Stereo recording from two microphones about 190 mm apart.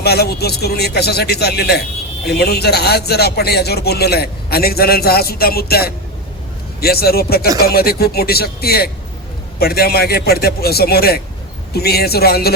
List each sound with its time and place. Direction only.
0.0 s a man's voice: 55° left (ahead or behind)